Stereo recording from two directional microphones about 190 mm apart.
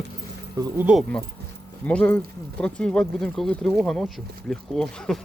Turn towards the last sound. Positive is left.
turn(degrees=5)  # may be behind; listen again after turning